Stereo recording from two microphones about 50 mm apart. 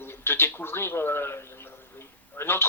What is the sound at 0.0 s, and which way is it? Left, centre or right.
A man's voice, left.